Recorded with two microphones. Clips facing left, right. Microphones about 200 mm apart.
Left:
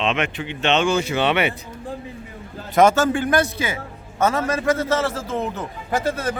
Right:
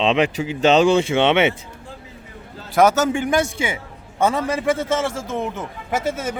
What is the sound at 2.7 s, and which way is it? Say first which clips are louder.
Speech: even; 5° right (ahead or behind).